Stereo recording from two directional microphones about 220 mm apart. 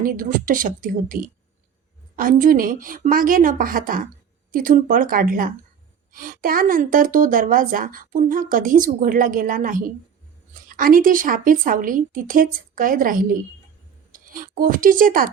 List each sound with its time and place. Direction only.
0.0 s a woman's voice: 40° right (ahead or behind)